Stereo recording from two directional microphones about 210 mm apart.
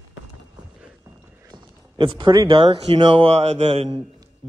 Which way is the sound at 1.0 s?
10° right (ahead or behind).